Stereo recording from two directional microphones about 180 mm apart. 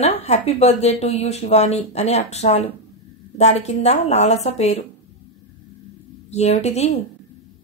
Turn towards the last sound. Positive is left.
turn(degrees=35)  # may be behind; listen again after turning